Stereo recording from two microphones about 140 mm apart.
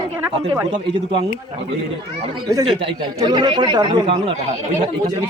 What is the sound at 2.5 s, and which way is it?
Speech, 25° right (ahead or behind).